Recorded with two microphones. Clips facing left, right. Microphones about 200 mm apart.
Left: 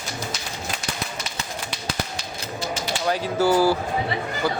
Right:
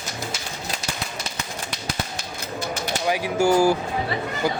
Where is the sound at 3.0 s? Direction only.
15° right (ahead or behind).